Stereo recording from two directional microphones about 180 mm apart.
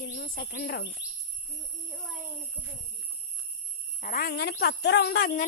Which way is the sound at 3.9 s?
50° left (ahead or behind).